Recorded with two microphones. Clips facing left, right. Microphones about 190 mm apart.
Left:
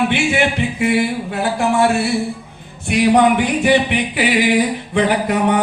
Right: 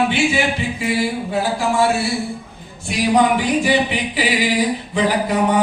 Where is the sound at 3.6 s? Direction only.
60° left (ahead or behind).